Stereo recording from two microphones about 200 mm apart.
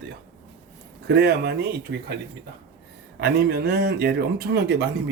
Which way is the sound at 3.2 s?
55° right (ahead or behind).